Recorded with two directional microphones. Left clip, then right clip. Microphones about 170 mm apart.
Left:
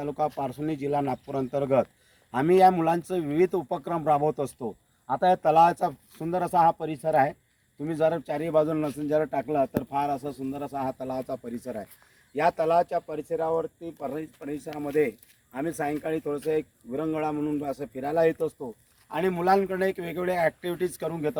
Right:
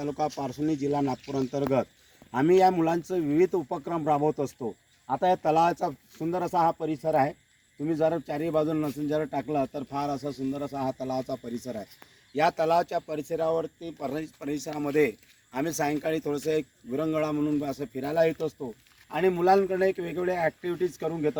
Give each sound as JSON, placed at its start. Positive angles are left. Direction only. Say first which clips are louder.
{"t": 0.0, "sound": "speech", "louder": "left 2 dB", "side_deg": 5}
{"t": 8.9, "sound": "speech", "louder": "left 3 dB", "side_deg": -25}
{"t": 9.9, "sound": "a man's voice", "louder": "left 3 dB", "side_deg": -40}
{"t": 10.2, "sound": "speech", "louder": "right 1 dB", "side_deg": -15}
{"t": 10.5, "sound": "speech", "louder": "left 2 dB", "side_deg": -50}
{"t": 12.3, "sound": "a man's voice", "louder": "left 1 dB", "side_deg": -90}
{"t": 19.0, "sound": "a man's voice", "louder": "right 1 dB", "side_deg": -45}
{"t": 19.6, "sound": "speech", "louder": "right 2 dB", "side_deg": -30}